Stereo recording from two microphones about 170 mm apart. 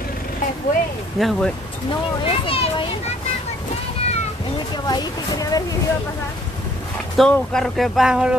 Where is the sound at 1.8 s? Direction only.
30° left (ahead or behind).